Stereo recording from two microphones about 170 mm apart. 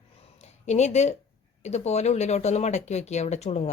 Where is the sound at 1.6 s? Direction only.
40° left (ahead or behind).